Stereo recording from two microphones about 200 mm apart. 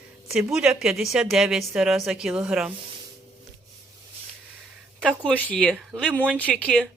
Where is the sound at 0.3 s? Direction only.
5° right (ahead or behind).